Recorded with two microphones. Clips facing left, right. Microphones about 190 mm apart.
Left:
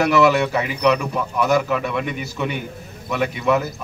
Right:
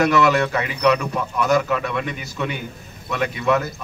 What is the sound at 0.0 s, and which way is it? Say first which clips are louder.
A man's voice: left 1 dB; 5° left (ahead or behind).